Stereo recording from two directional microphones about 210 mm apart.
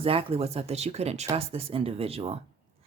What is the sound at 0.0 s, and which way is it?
Speech, 25° right (ahead or behind).